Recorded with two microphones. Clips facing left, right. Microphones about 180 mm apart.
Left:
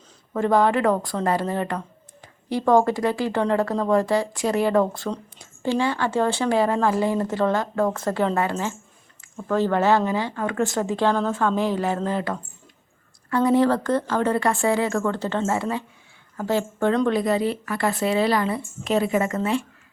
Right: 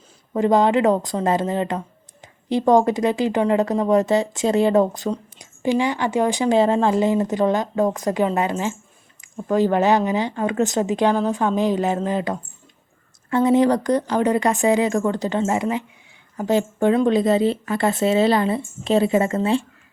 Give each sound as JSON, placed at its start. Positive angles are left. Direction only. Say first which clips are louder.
{"t": 0.3, "sound": "a woman's voice", "louder": "right 3 dB", "side_deg": -20}
{"t": 17.1, "sound": "speech", "louder": "right 4 dB", "side_deg": -25}